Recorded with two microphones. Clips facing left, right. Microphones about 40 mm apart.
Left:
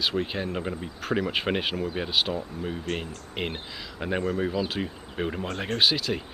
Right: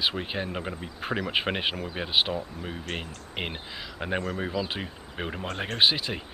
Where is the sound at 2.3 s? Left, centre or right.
Centre.